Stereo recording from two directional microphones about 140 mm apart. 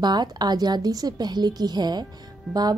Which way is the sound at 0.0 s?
30° right (ahead or behind).